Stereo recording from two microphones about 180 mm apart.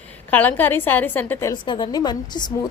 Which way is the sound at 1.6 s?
25° left (ahead or behind).